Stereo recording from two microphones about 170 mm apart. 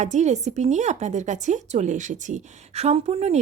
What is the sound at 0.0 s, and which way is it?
Speech, 45° right (ahead or behind).